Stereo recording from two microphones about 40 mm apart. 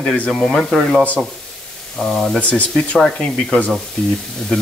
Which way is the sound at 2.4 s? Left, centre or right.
Left.